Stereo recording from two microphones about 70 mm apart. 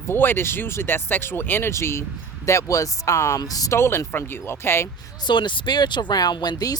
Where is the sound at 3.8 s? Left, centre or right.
Left.